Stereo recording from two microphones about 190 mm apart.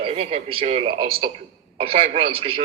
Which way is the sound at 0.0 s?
30° right (ahead or behind).